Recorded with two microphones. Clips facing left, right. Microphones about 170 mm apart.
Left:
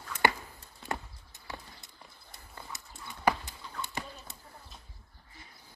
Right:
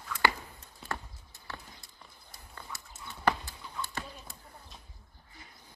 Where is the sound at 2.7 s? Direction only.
20° left (ahead or behind).